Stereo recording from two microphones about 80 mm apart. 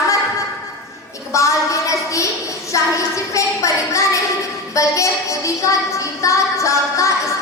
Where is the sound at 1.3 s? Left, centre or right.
Left.